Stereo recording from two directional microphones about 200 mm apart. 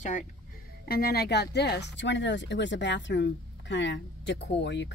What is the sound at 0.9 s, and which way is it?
Speech, 50° left (ahead or behind).